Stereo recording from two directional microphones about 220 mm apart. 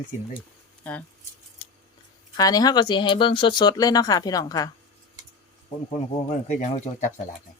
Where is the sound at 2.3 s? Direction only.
15° left (ahead or behind).